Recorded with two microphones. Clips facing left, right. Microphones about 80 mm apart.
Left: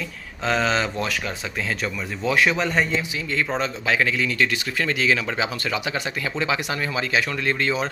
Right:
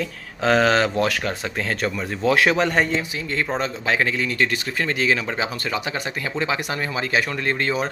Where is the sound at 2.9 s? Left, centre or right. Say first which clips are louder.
Even; right.